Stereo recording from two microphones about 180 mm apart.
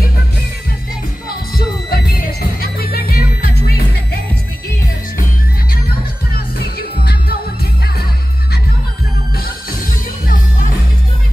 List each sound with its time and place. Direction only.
1.9 s music: 60° left (ahead or behind)
6.3 s music: 60° left (ahead or behind)
9.4 s music: 50° left (ahead or behind)